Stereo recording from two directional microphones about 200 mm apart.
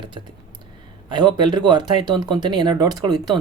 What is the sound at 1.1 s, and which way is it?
Speech, 20° right (ahead or behind).